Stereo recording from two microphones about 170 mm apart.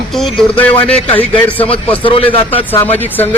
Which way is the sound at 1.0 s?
30° left (ahead or behind).